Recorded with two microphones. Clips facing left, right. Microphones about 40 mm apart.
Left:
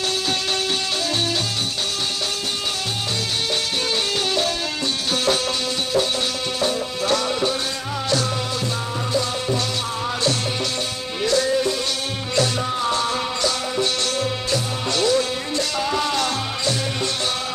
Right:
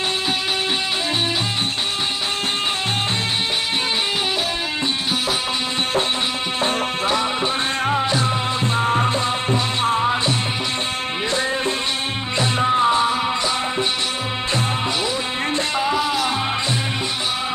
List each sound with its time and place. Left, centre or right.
7.1 s music: right
15.0 s music: centre